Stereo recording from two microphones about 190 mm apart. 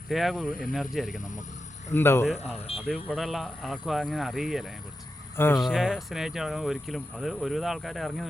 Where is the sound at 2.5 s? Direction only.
30° left (ahead or behind).